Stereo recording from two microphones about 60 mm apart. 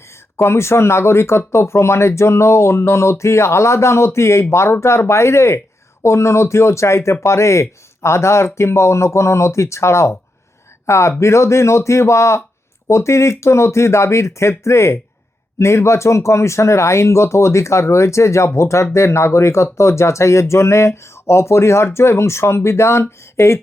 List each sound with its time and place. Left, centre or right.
0.3 s speech: left